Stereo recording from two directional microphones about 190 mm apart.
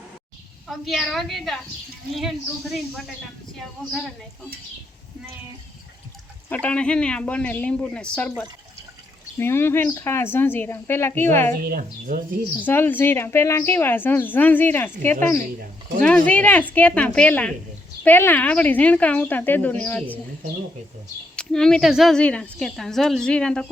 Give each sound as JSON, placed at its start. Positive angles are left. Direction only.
{"t": 0.7, "sound": "a woman's voice", "side_deg": 0}
{"t": 6.5, "sound": "a woman's voice", "side_deg": 5}
{"t": 9.4, "sound": "speech", "side_deg": 10}
{"t": 11.6, "sound": "speech", "side_deg": -45}
{"t": 12.5, "sound": "speech", "side_deg": 10}
{"t": 21.3, "sound": "a woman's voice", "side_deg": 5}